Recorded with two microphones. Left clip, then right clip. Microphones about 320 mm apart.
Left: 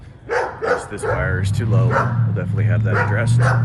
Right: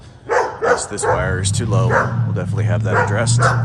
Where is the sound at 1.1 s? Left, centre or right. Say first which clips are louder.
Right 3 dB; centre.